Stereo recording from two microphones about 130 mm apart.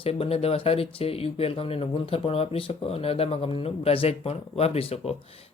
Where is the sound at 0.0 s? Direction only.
50° left (ahead or behind).